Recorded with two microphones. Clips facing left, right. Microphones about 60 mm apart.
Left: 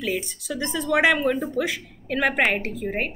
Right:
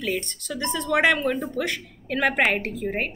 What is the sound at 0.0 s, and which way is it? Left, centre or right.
Speech, centre.